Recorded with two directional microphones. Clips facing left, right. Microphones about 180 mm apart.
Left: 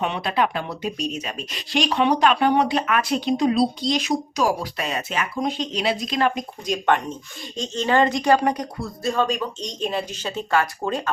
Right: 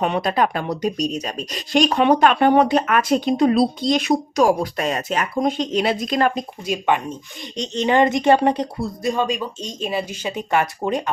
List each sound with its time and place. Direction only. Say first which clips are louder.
0.0 s speech: right 3 dB; 45° right (ahead or behind)
6.7 s speech: even; 10° right (ahead or behind); by 8.9 s 25° right (ahead or behind)
9.0 s speech: even; 15° right (ahead or behind)